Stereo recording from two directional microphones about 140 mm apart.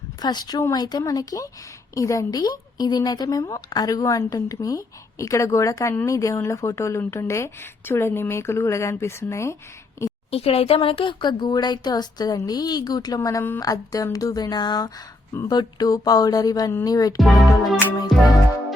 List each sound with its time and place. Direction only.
0.2 s speech: 30° left (ahead or behind)
10.0 s a sound: 20° left (ahead or behind)
10.3 s speech: 45° left (ahead or behind); by 17.2 s 25° left (ahead or behind)
18.1 s music: centre (ahead or behind)